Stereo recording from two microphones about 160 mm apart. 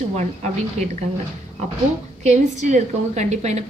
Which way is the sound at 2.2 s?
45° right (ahead or behind).